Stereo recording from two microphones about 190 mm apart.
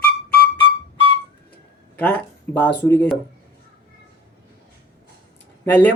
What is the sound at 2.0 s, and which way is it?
Speech, 10° left (ahead or behind).